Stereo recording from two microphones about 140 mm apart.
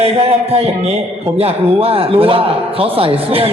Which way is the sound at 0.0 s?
45° right (ahead or behind).